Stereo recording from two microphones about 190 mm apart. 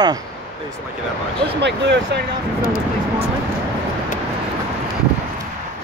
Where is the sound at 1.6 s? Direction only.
65° right (ahead or behind).